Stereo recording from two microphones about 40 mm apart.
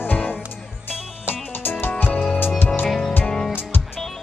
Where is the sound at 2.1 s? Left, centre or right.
Left.